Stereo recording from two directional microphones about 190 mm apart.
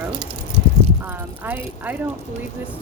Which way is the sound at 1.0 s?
10° right (ahead or behind).